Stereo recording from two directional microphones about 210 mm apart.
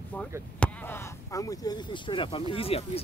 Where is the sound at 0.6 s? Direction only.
5° left (ahead or behind).